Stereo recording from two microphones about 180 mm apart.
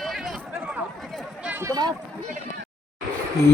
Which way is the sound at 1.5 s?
20° right (ahead or behind).